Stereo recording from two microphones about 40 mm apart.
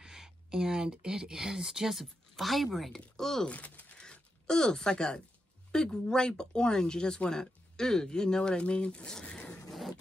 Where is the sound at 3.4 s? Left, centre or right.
Left.